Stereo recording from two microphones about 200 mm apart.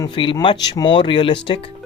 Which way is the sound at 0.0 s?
20° left (ahead or behind).